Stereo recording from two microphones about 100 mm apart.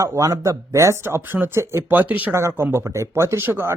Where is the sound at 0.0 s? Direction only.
35° right (ahead or behind).